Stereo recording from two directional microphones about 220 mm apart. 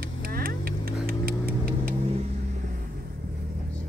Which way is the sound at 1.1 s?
40° right (ahead or behind).